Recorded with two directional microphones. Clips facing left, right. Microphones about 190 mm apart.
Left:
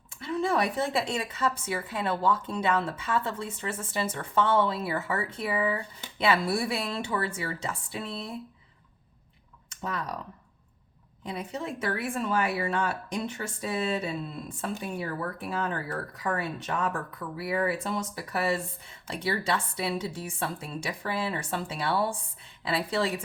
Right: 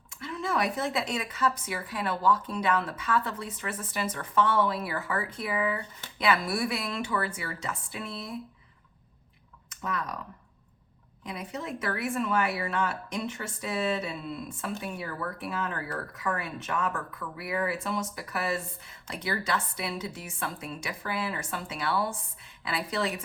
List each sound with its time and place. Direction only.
0.2 s a woman's voice: 30° left (ahead or behind)
9.6 s speech: 30° left (ahead or behind)
11.3 s speech: 30° left (ahead or behind)